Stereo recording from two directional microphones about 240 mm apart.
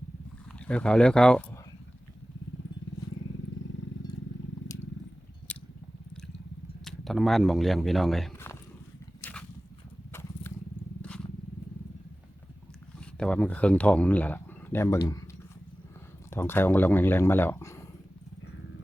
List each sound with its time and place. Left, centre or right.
0.7 s speech: centre
4.0 s a sound: centre
4.7 s wild animals: centre
5.5 s chewing: centre
6.8 s speech: centre
9.2 s a sound: centre
10.1 s horse: centre
13.1 s speech: centre
16.3 s speech: centre